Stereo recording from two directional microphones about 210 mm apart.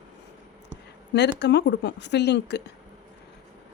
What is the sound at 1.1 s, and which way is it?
Speech, 55° left (ahead or behind).